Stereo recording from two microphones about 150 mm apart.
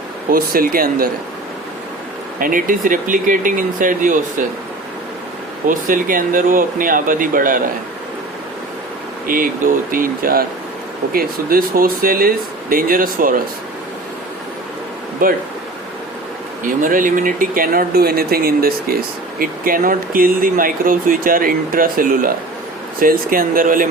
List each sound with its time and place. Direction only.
0.3 s speech: 75° right (ahead or behind)
2.4 s speech: 65° right (ahead or behind)
5.6 s speech: 65° right (ahead or behind)
9.2 s speech: 70° right (ahead or behind)
15.2 s speech: 65° right (ahead or behind)
16.6 s speech: 65° right (ahead or behind); by 18.9 s 90° right
19.4 s speech: 70° right (ahead or behind)